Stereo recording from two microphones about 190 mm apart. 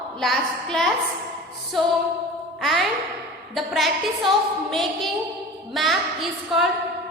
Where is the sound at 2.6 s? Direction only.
Centre (ahead or behind).